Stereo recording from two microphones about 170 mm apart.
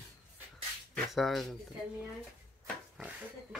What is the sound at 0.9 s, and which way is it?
Speech, centre (ahead or behind).